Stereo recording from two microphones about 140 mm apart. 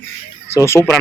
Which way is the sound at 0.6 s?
20° left (ahead or behind).